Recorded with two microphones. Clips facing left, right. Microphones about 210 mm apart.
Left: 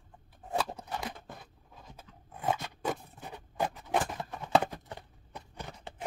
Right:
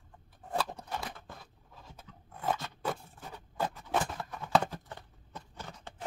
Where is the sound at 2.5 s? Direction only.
15° left (ahead or behind).